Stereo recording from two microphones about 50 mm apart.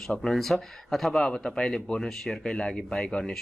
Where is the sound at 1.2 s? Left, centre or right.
Centre.